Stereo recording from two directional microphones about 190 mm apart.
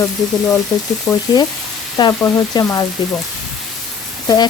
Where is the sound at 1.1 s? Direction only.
15° left (ahead or behind).